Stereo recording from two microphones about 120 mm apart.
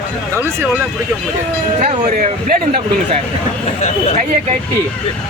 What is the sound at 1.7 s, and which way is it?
Speech, 70° right (ahead or behind).